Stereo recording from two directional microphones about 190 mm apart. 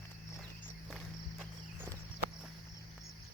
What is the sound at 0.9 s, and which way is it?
Walk, centre (ahead or behind).